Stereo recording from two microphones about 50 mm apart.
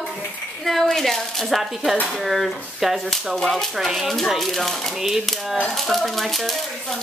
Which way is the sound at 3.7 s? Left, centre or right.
Centre.